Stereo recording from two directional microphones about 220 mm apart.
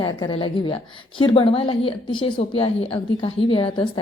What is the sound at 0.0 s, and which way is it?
A woman's voice, 20° left (ahead or behind).